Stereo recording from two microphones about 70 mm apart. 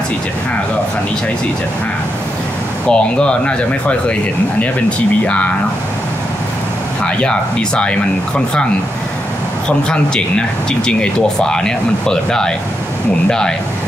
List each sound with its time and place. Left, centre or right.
2.9 s speech: centre
7.1 s speech: centre
9.7 s speech: centre